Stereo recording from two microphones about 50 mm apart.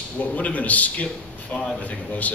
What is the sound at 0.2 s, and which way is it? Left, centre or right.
A man's voice, left.